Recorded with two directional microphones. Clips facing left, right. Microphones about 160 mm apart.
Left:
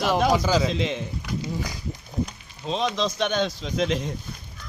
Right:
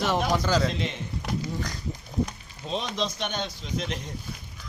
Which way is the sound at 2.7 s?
90° left.